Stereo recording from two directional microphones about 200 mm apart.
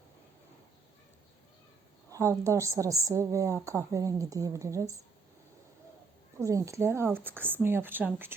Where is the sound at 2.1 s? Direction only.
15° right (ahead or behind).